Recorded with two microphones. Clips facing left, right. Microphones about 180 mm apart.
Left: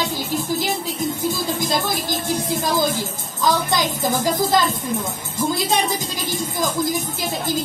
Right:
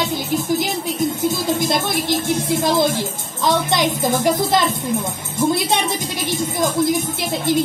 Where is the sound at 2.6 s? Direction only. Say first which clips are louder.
Right 4 dB; 25° right (ahead or behind).